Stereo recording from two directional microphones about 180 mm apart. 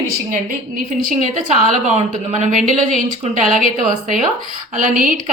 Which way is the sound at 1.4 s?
45° right (ahead or behind).